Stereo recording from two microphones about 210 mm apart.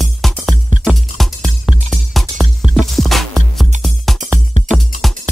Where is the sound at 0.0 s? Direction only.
Centre (ahead or behind).